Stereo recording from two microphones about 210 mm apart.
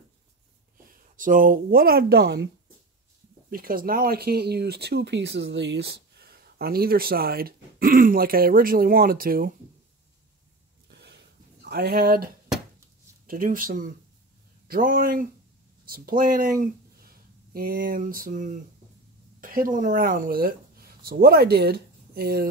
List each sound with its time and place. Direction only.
0.8 s speech: 40° right (ahead or behind)
10.9 s a sound: 55° right (ahead or behind)
11.7 s speech: 50° right (ahead or behind)
13.3 s speech: 40° right (ahead or behind)